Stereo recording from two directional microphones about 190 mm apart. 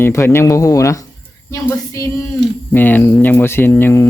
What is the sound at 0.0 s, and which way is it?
Speech, 15° left (ahead or behind).